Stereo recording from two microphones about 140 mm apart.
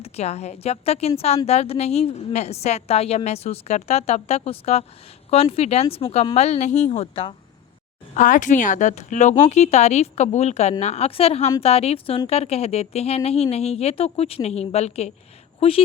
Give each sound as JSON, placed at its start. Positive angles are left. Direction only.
{"t": 0.0, "sound": "a woman's voice", "side_deg": 50}
{"t": 8.1, "sound": "a woman's voice", "side_deg": 65}